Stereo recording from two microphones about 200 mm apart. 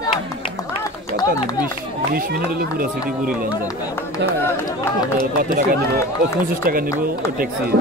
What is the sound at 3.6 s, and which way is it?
Speech, 15° left (ahead or behind).